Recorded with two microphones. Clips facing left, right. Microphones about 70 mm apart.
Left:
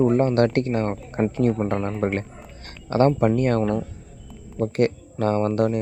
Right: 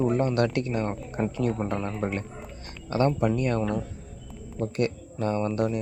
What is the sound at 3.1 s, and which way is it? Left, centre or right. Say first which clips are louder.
Speech: left 5 dB; left.